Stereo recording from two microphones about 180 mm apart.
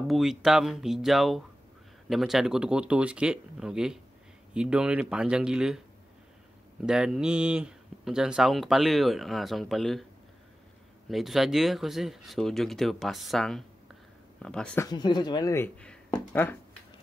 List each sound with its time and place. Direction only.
0.1 s speech: centre (ahead or behind)
6.9 s speech: 5° right (ahead or behind)
11.1 s speech: centre (ahead or behind)
14.9 s speech: 25° left (ahead or behind)